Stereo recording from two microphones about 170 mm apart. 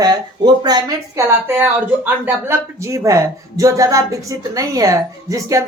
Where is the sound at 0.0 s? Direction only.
25° right (ahead or behind).